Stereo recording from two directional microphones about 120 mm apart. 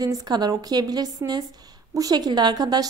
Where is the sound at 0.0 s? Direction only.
30° right (ahead or behind).